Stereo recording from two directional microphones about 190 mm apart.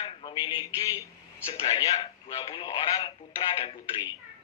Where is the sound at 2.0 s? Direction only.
30° left (ahead or behind).